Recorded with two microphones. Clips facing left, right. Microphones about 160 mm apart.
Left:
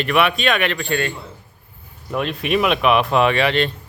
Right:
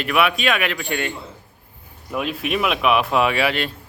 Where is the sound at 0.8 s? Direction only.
15° right (ahead or behind).